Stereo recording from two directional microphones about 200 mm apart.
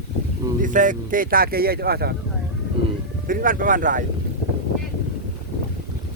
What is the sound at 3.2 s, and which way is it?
Speech, 45° right (ahead or behind).